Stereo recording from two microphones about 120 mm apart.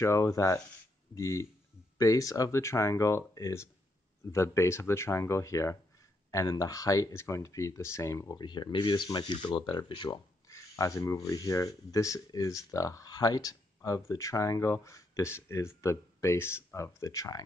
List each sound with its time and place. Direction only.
0.0 s speech: 25° left (ahead or behind)
8.5 s speech: 40° left (ahead or behind)